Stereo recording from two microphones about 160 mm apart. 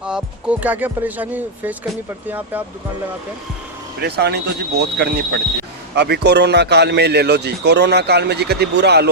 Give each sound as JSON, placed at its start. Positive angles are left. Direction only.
{"t": 0.0, "sound": "speech", "side_deg": -5}
{"t": 4.0, "sound": "a man's voice", "side_deg": -90}